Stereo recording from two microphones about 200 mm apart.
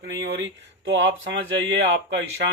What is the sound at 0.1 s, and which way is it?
Speech, 60° right (ahead or behind).